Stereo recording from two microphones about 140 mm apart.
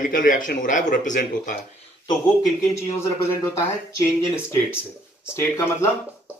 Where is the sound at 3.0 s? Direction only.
20° left (ahead or behind).